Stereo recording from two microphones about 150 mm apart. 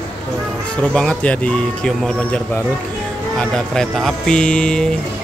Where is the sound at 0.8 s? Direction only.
5° left (ahead or behind).